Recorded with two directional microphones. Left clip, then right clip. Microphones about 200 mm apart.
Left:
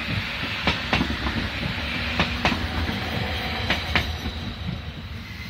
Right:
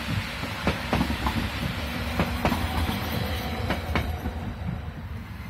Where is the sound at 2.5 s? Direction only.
30° right (ahead or behind).